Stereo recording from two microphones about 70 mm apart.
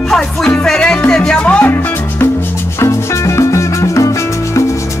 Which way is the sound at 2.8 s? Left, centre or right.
Left.